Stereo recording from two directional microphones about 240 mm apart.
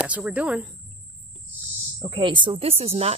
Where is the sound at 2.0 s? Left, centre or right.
Centre.